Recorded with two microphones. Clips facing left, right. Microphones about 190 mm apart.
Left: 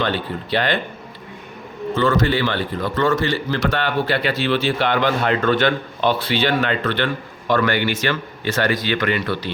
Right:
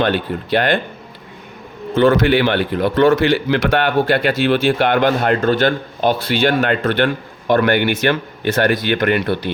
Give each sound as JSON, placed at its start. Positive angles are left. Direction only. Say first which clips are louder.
{"t": 0.0, "sound": "speech", "louder": "right 5 dB", "side_deg": -50}
{"t": 2.0, "sound": "a man's voice", "louder": "right 6 dB", "side_deg": -60}